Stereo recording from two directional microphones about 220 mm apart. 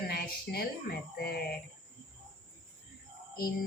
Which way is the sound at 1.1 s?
45° left (ahead or behind).